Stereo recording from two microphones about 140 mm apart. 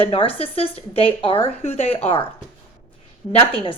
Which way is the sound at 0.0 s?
40° left (ahead or behind).